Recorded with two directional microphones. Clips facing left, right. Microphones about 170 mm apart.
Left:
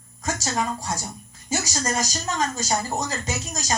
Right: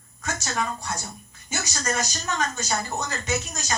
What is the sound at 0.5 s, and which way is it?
A woman's voice, 25° left (ahead or behind).